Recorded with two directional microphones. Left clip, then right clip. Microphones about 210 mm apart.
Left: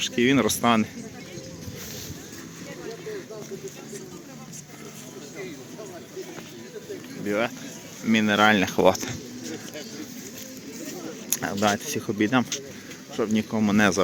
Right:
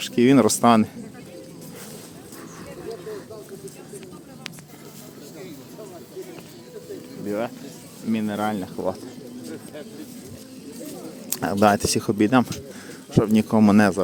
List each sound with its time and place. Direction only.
0.0 s speech: 25° right (ahead or behind)
7.3 s speech: 5° right (ahead or behind)
8.1 s speech: 5° left (ahead or behind)
8.6 s speech: 30° left (ahead or behind)
11.3 s speech: 15° right (ahead or behind)